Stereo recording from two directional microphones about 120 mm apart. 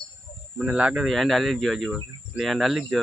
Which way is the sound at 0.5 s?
10° right (ahead or behind).